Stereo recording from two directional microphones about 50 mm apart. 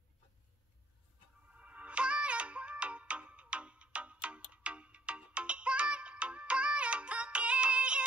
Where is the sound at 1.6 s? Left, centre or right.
Right.